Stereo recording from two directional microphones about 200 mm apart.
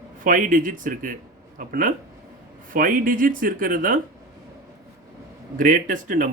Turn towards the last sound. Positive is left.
turn(degrees=-40)  # may be behind; listen again after turning